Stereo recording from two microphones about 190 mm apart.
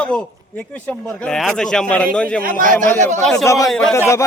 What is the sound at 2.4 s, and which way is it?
Speech, 45° right (ahead or behind).